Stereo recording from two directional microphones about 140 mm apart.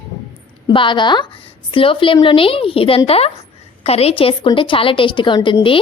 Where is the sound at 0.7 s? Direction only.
35° left (ahead or behind).